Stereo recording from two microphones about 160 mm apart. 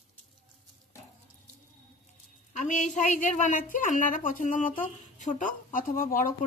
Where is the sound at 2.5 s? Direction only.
50° left (ahead or behind).